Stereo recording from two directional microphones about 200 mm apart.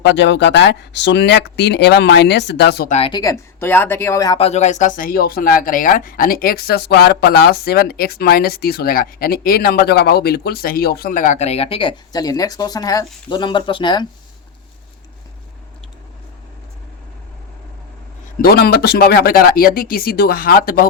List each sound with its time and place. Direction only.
0.0 s speech: 60° left (ahead or behind)
2.9 s speech: 25° left (ahead or behind)
18.4 s speech: 50° left (ahead or behind)